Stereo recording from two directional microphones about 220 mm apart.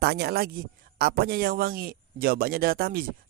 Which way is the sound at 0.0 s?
45° right (ahead or behind).